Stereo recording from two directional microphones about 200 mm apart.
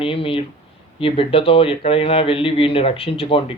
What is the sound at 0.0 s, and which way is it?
A man's voice, 25° left (ahead or behind).